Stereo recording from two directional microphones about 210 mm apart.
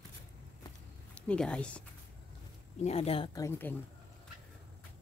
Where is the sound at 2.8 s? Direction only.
30° left (ahead or behind).